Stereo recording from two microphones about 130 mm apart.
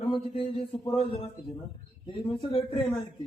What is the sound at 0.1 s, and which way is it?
A man's voice, 45° left (ahead or behind).